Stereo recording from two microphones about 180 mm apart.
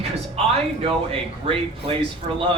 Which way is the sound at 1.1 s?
30° right (ahead or behind).